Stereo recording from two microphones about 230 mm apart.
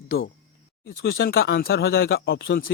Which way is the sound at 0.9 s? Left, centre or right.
Left.